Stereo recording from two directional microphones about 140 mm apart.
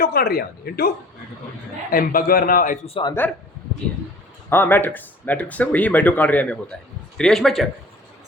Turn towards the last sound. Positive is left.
turn(degrees=0)  # may be behind; listen again after turning